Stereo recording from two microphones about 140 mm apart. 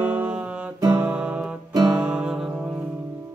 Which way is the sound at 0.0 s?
10° right (ahead or behind).